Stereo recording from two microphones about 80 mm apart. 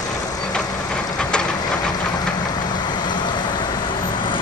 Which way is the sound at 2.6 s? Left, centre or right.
Left.